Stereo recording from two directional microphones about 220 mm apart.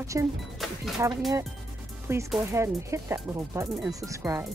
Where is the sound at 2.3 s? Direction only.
15° right (ahead or behind).